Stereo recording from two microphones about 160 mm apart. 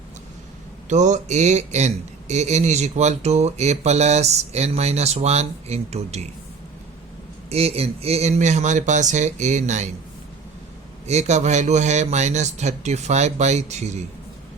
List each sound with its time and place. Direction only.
0.9 s speech: 50° right (ahead or behind)
7.5 s speech: 40° right (ahead or behind)
11.0 s speech: 45° right (ahead or behind)